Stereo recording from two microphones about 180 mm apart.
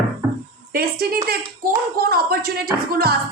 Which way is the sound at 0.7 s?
60° right (ahead or behind).